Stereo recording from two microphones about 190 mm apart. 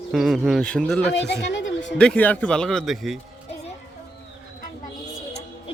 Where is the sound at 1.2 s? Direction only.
70° left (ahead or behind).